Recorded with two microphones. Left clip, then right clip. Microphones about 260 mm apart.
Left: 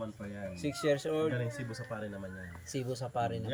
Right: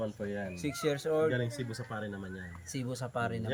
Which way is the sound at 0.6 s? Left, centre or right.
Centre.